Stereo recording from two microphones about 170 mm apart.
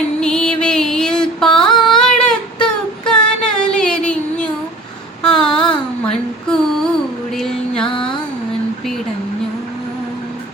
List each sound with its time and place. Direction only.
0.2 s music: 5° left (ahead or behind)
5.2 s a sound: 5° left (ahead or behind)
6.1 s female singing: 5° left (ahead or behind)
7.3 s music: 5° left (ahead or behind)
7.9 s music: 30° left (ahead or behind)